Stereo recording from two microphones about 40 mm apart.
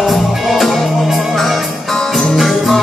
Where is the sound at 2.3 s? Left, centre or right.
Centre.